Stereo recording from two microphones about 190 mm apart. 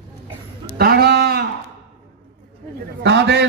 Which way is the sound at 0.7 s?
55° right (ahead or behind).